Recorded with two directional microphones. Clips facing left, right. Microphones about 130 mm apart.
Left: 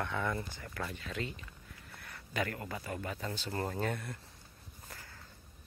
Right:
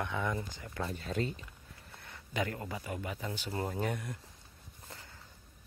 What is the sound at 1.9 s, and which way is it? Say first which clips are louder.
Speech: right 1 dB; 20° right (ahead or behind).